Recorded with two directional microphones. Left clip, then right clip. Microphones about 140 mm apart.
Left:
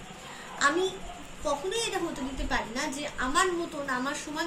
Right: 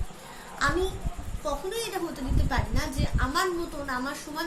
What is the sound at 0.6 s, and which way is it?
A child's voice, 20° right (ahead or behind).